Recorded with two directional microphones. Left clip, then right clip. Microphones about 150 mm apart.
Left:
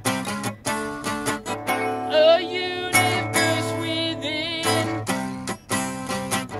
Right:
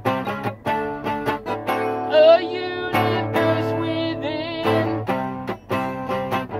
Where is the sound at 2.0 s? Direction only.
20° left (ahead or behind).